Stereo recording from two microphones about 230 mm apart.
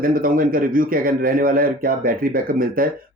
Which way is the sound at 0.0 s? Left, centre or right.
Right.